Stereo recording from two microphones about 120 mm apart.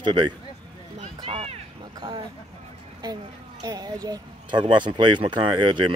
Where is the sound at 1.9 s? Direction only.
35° right (ahead or behind).